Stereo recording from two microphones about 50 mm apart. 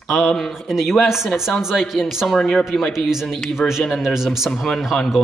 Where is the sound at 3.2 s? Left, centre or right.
Centre.